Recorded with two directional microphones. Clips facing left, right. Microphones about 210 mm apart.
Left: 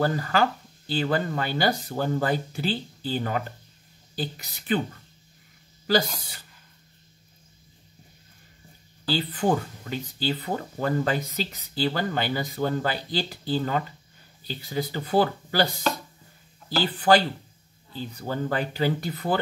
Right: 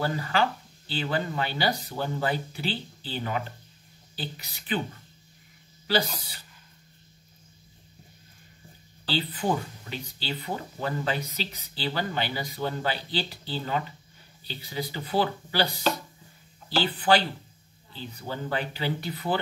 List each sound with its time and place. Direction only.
0.0 s speech: 45° left (ahead or behind)
5.9 s speech: 45° left (ahead or behind)
9.1 s speech: 45° left (ahead or behind)